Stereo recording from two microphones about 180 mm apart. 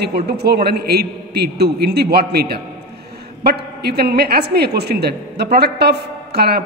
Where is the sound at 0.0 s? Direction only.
65° right (ahead or behind).